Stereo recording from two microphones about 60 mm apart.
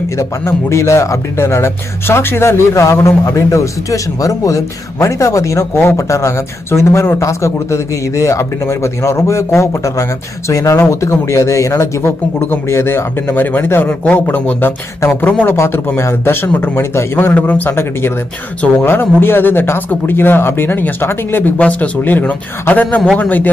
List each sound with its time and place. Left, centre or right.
0.2 s speech: left
3.3 s speech: left
12.0 s speech: left
12.6 s speech: left
13.8 s speech: left
15.4 s speech: left
17.3 s speech: left
18.9 s speech: left